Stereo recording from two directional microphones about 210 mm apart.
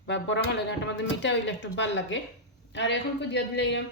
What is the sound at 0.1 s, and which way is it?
Speech, 60° left (ahead or behind).